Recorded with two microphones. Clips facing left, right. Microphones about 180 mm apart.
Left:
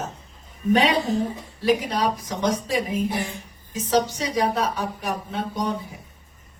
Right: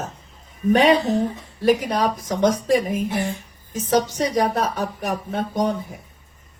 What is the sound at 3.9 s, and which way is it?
Speech, 50° right (ahead or behind).